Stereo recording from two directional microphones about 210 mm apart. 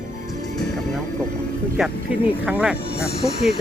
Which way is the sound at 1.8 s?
Centre (ahead or behind).